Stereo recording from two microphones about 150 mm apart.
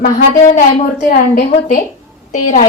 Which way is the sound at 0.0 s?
60° left (ahead or behind).